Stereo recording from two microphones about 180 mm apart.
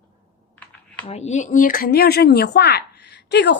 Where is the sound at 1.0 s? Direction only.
35° left (ahead or behind).